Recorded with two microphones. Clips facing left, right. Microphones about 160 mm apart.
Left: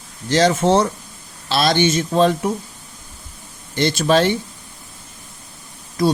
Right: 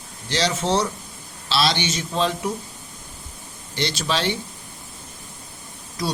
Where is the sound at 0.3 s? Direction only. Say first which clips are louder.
Left 7 dB; 50° left (ahead or behind).